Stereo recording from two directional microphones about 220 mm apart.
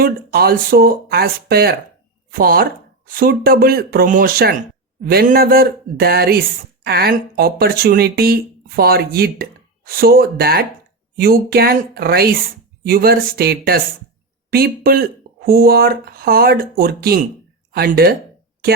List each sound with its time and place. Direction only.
0.0 s speech: 45° right (ahead or behind)